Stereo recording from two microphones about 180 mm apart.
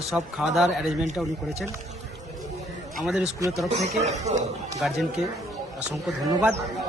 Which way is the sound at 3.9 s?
40° right (ahead or behind).